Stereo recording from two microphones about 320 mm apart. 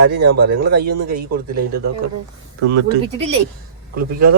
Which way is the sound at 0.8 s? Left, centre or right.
Right.